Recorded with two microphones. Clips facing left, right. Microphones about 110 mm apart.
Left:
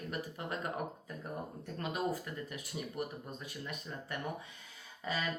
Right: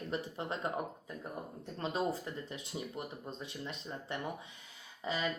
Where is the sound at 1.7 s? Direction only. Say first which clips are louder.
Right 1 dB; 25° right (ahead or behind).